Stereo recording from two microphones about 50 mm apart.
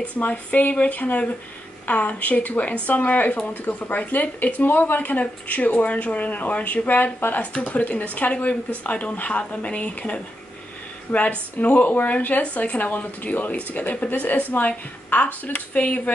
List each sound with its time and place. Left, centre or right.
0.0 s speech: left